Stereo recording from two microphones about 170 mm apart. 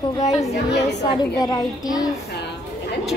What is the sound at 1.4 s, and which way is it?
Speech, 25° left (ahead or behind).